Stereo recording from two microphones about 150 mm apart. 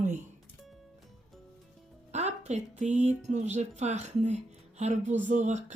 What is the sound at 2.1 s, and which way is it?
Speech, 50° right (ahead or behind).